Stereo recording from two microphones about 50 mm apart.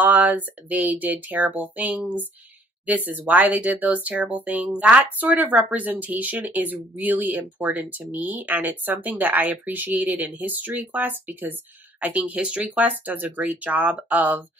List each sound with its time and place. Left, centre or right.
0.0 s speech: right
13.0 s speech: right